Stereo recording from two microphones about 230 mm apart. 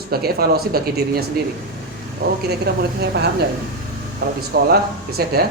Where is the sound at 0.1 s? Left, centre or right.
Right.